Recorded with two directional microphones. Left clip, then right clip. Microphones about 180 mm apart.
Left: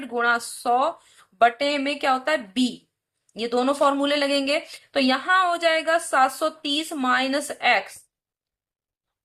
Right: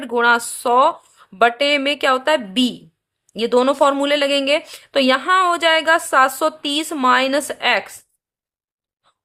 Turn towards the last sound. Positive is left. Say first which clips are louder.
# right 3 dB
turn(degrees=-45)  # may be behind; listen again after turning